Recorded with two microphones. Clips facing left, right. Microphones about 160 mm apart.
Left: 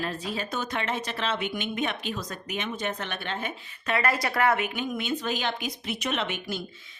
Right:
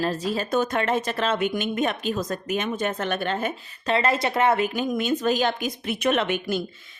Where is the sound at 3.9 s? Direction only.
25° right (ahead or behind).